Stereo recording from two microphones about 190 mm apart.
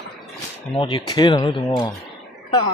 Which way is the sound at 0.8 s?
25° left (ahead or behind).